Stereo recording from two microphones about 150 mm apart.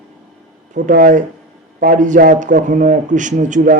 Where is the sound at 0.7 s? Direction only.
60° right (ahead or behind).